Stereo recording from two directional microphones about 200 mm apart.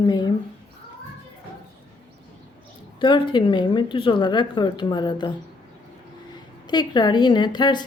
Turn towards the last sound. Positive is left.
turn(degrees=20)  # may be behind; listen again after turning